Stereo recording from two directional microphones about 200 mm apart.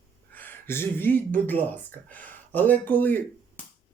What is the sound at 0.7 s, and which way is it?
Speech, 10° left (ahead or behind).